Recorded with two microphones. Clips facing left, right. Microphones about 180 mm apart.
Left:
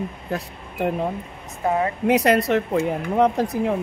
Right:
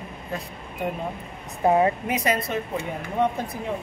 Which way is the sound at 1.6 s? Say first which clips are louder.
Right 3 dB; 25° right (ahead or behind).